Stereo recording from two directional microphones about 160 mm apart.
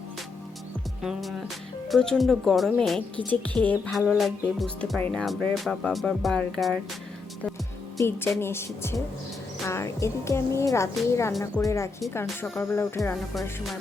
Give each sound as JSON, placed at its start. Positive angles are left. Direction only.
{"t": 1.0, "sound": "a woman's voice", "side_deg": 0}
{"t": 4.0, "sound": "speech", "side_deg": -5}
{"t": 7.9, "sound": "a woman's voice", "side_deg": 15}